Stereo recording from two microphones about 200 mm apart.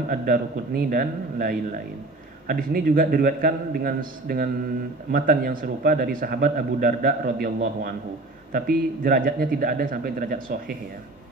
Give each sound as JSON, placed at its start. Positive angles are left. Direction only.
{"t": 0.1, "sound": "a man's voice", "side_deg": -45}